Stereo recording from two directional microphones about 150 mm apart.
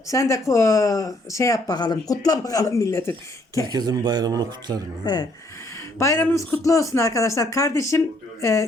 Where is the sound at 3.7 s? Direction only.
25° right (ahead or behind).